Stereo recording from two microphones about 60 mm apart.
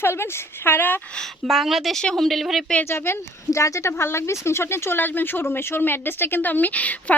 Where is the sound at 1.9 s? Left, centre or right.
Centre.